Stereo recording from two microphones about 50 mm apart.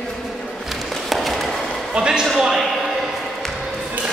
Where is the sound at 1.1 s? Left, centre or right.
Centre.